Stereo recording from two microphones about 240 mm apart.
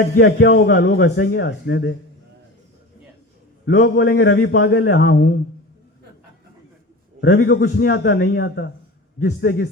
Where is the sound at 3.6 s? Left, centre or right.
Left.